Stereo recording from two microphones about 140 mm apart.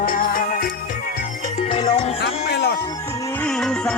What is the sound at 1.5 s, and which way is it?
Music, 45° left (ahead or behind).